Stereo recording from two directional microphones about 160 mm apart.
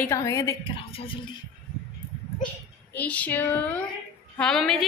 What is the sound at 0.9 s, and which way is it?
Speech, 35° left (ahead or behind).